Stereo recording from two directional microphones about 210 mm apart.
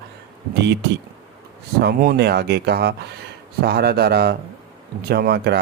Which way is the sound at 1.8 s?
50° right (ahead or behind).